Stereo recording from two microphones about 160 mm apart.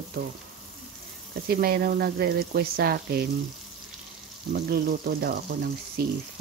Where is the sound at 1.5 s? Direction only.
70° right (ahead or behind).